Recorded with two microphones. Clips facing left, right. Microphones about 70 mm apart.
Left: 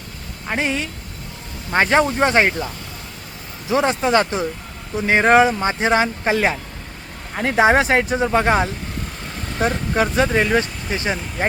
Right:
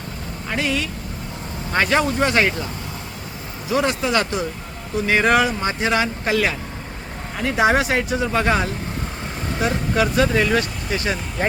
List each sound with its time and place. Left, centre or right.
0.4 s speech: left
3.7 s speech: left